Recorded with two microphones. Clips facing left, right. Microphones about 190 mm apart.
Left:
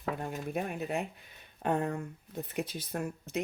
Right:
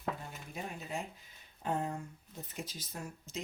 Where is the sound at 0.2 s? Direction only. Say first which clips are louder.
Left 10 dB; 60° left (ahead or behind).